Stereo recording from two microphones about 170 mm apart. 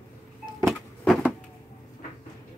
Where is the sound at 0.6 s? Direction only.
Centre (ahead or behind).